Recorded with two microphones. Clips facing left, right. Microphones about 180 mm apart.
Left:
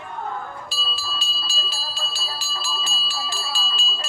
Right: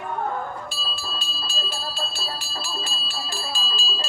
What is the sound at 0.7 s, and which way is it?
Bell, 55° right (ahead or behind).